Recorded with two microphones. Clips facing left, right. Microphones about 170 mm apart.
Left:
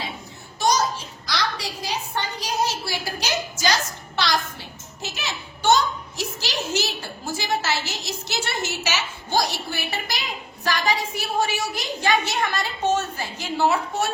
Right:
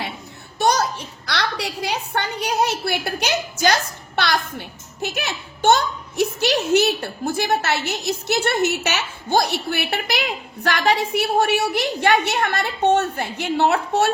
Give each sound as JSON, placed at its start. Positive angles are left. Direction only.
{"t": 0.6, "sound": "a child's voice", "side_deg": -65}